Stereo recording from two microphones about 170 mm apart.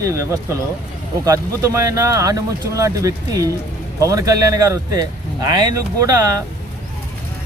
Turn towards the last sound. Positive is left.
turn(degrees=-20)  # may be behind; listen again after turning